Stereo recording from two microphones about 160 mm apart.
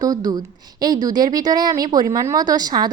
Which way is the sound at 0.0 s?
25° right (ahead or behind).